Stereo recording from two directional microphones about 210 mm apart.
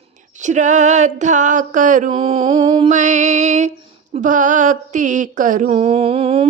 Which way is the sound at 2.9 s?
35° right (ahead or behind).